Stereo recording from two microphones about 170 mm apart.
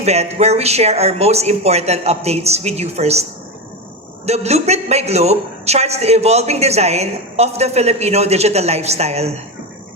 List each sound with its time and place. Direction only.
0.0 s a woman's voice: 40° right (ahead or behind)
4.3 s a woman's voice: 40° right (ahead or behind)